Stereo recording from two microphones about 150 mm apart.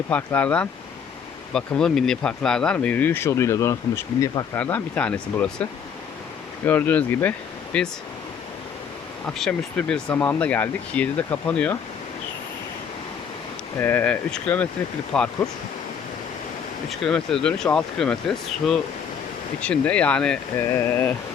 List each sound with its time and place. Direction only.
0.1 s speech: 10° left (ahead or behind)
4.5 s speech: 10° left (ahead or behind)
6.7 s speech: 10° left (ahead or behind)
9.2 s speech: 5° left (ahead or behind)
13.7 s speech: 15° left (ahead or behind)
16.9 s speech: 5° left (ahead or behind)
20.6 s speech: 15° left (ahead or behind)